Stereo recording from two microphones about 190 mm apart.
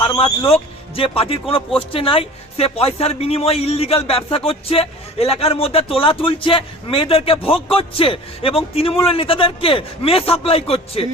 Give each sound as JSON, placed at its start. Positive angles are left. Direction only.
{"t": 0.0, "sound": "speech", "side_deg": 30}